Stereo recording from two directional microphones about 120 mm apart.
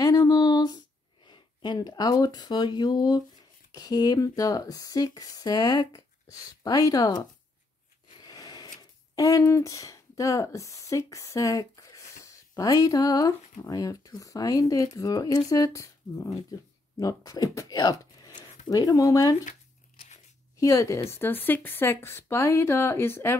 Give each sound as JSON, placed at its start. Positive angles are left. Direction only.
{"t": 0.0, "sound": "a sound", "side_deg": 30}
{"t": 1.2, "sound": "speech", "side_deg": 40}
{"t": 8.2, "sound": "speech", "side_deg": 35}
{"t": 20.5, "sound": "speech", "side_deg": 25}